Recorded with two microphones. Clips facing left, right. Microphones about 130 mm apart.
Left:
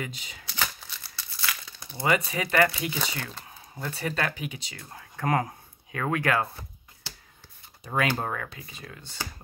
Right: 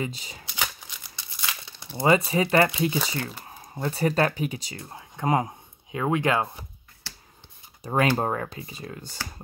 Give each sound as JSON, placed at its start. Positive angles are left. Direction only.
{"t": 0.0, "sound": "speech", "side_deg": -30}
{"t": 0.6, "sound": "crumpling", "side_deg": -15}
{"t": 3.4, "sound": "a sound", "side_deg": -30}
{"t": 3.9, "sound": "speech", "side_deg": -40}
{"t": 4.7, "sound": "speech", "side_deg": -25}
{"t": 7.8, "sound": "speech", "side_deg": -35}